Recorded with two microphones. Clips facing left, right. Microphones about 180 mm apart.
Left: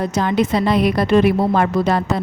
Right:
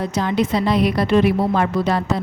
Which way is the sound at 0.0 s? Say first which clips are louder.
Left 2 dB; 50° left (ahead or behind).